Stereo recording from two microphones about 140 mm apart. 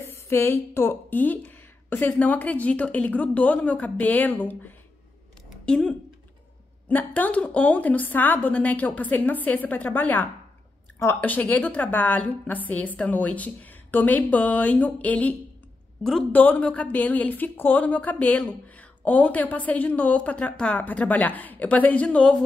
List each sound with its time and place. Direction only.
0.0 s a woman's voice: 20° left (ahead or behind)
5.5 s a sound: 5° left (ahead or behind)
6.9 s a woman's voice: 10° left (ahead or behind)